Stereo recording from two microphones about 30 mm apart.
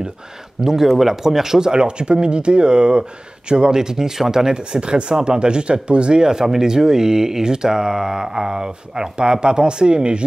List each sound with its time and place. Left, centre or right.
0.6 s speech: centre
4.7 s speech: right